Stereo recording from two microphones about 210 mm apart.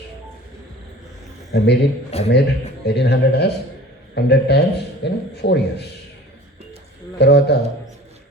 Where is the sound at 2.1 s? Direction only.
30° left (ahead or behind).